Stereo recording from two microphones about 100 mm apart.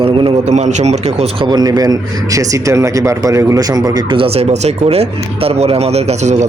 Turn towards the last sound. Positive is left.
turn(degrees=-90)